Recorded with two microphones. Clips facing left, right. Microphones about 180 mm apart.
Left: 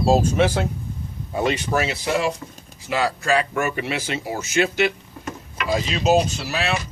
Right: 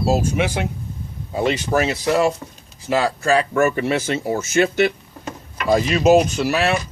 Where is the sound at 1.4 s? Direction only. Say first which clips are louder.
Right 2 dB; 30° right (ahead or behind).